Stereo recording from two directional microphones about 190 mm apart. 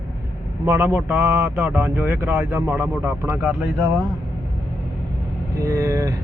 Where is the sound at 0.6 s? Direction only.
10° right (ahead or behind).